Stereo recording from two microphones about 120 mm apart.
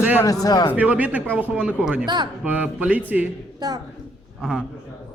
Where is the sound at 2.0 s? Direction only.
40° right (ahead or behind).